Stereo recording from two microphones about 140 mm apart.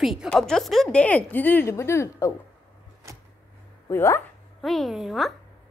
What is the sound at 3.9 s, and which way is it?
Speech, 20° left (ahead or behind).